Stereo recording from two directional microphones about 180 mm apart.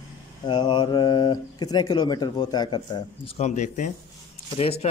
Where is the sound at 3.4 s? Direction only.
40° left (ahead or behind).